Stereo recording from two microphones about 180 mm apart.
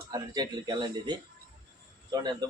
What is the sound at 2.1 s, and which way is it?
Speech, 20° right (ahead or behind).